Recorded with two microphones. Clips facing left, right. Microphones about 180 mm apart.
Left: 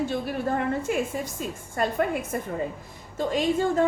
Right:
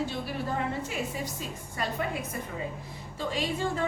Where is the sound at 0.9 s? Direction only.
50° left (ahead or behind).